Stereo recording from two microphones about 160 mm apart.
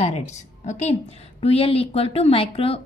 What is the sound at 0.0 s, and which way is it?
A woman's voice, 45° left (ahead or behind).